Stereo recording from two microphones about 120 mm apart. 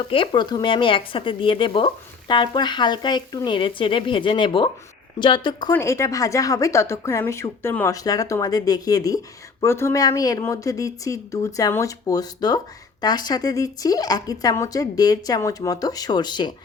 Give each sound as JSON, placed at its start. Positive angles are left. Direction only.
{"t": 0.0, "sound": "speech", "side_deg": 45}
{"t": 5.7, "sound": "speech", "side_deg": 25}
{"t": 7.9, "sound": "speech", "side_deg": 30}